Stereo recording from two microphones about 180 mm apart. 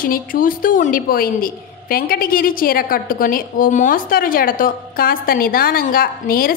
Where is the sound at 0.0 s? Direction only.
50° left (ahead or behind).